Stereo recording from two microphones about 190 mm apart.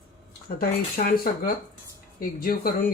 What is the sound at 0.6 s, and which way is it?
Speech, 50° left (ahead or behind).